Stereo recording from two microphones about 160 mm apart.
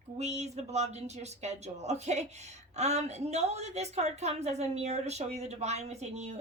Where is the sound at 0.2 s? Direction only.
45° right (ahead or behind).